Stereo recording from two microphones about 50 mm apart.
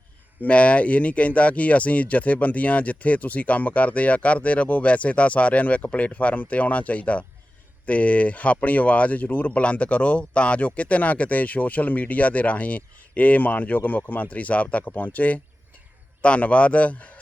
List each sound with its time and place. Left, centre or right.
0.4 s speech: left